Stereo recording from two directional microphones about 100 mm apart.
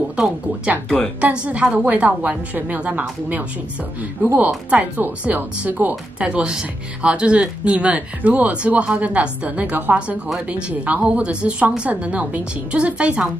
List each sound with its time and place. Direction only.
0.1 s speech: 10° right (ahead or behind)
0.8 s a woman's voice: 5° left (ahead or behind)
1.2 s speech: 10° right (ahead or behind)